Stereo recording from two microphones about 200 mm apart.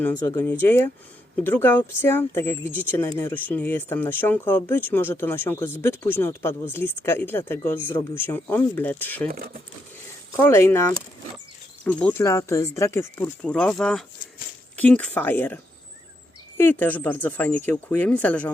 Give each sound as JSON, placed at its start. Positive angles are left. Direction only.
{"t": 0.0, "sound": "speech", "side_deg": 15}
{"t": 9.3, "sound": "speech", "side_deg": -45}
{"t": 10.3, "sound": "speech", "side_deg": 10}